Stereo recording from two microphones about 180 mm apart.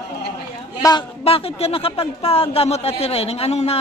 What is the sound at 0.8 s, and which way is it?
A man's voice, 30° left (ahead or behind).